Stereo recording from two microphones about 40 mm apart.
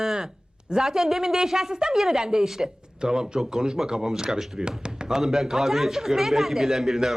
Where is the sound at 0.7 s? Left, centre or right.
Centre.